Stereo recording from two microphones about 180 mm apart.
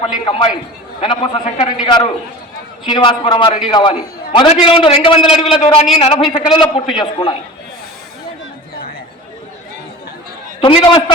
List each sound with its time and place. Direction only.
0.3 s a man's voice: 30° left (ahead or behind)
10.6 s a man's voice: 30° left (ahead or behind)